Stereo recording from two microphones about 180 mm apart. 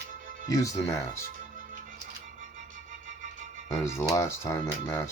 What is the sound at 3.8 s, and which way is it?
Speech, 15° left (ahead or behind).